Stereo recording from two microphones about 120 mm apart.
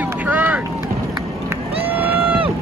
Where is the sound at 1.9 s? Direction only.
15° right (ahead or behind).